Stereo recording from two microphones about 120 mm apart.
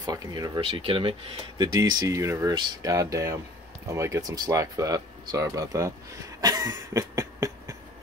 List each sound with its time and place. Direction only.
0.0 s speech: 30° right (ahead or behind)
0.6 s speech: 50° right (ahead or behind)
1.6 s speech: 30° right (ahead or behind)
6.4 s cough: 30° right (ahead or behind)